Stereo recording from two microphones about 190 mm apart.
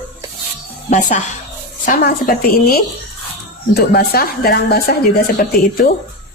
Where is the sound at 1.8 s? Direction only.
50° left (ahead or behind).